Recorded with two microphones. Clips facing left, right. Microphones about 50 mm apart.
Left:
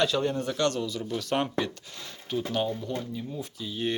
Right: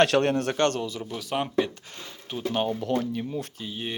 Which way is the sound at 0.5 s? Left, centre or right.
Right.